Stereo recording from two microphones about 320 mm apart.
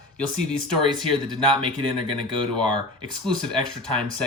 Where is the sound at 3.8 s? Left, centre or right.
Centre.